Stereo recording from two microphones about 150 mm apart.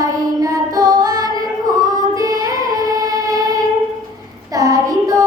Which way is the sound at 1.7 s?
25° right (ahead or behind).